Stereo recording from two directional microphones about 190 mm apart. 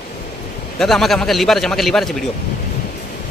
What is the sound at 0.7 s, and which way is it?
A man's voice, centre (ahead or behind).